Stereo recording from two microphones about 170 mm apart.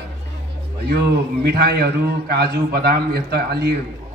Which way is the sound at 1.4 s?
75° right (ahead or behind).